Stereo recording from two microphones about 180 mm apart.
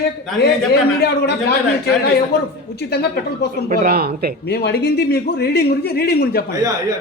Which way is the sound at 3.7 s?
55° right (ahead or behind).